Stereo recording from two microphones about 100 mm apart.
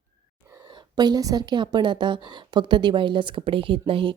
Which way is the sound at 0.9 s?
45° right (ahead or behind).